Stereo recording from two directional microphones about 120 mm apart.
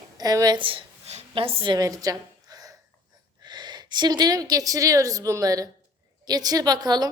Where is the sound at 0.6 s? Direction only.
45° right (ahead or behind).